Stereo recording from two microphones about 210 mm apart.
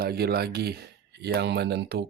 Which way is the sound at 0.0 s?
50° right (ahead or behind).